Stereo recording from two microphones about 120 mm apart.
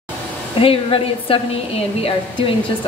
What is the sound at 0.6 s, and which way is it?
A woman's voice, 50° left (ahead or behind).